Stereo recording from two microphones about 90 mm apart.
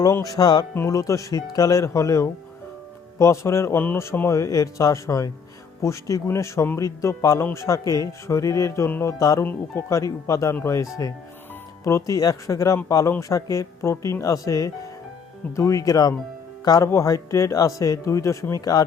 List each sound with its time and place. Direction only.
0.0 s speech: 40° left (ahead or behind)
9.4 s speech: 25° left (ahead or behind)
10.0 s speech: 35° left (ahead or behind)
16.9 s speech: 35° left (ahead or behind)